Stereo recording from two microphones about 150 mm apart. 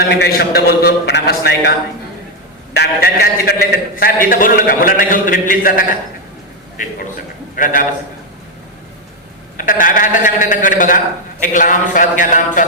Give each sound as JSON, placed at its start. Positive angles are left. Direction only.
{"t": 0.2, "sound": "a man's voice", "side_deg": 90}
{"t": 2.7, "sound": "a man's voice", "side_deg": 90}
{"t": 7.5, "sound": "a man's voice", "side_deg": 60}
{"t": 9.6, "sound": "a man's voice", "side_deg": 65}